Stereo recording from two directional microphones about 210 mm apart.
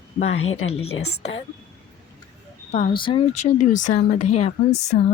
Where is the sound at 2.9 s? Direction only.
25° left (ahead or behind).